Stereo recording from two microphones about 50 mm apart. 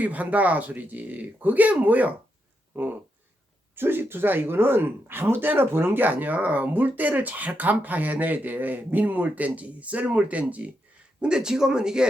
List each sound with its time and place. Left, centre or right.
0.0 s speech: right
3.8 s speech: right
11.2 s speech: centre